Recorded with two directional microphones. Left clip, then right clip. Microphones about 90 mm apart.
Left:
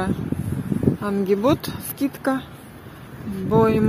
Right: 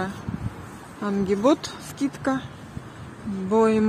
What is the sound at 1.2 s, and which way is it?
Speech, centre (ahead or behind).